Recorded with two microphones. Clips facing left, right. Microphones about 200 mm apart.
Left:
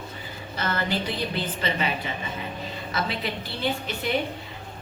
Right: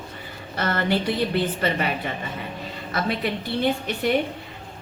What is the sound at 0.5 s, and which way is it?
A woman's voice, 65° right (ahead or behind).